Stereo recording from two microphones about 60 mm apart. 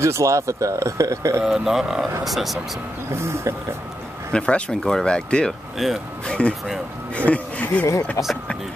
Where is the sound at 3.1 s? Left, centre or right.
Right.